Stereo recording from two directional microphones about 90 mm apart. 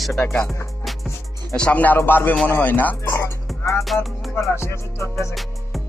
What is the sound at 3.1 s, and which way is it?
Speech, 30° left (ahead or behind).